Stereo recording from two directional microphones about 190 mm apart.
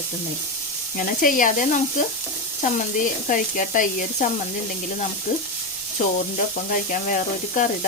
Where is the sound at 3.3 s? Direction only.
45° left (ahead or behind).